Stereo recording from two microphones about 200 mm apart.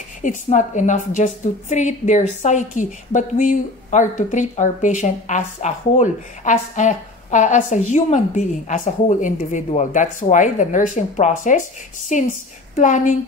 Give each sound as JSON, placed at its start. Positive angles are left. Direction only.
{"t": 0.2, "sound": "a woman's voice", "side_deg": 40}